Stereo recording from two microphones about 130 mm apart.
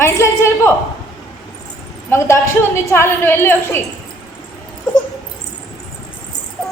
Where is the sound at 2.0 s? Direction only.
20° left (ahead or behind).